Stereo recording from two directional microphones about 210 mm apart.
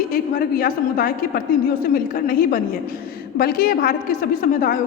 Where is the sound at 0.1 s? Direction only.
45° left (ahead or behind).